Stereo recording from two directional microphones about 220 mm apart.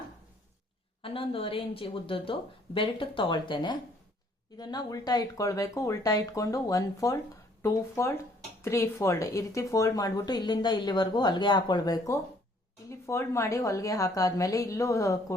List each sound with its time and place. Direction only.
1.0 s speech: 25° left (ahead or behind)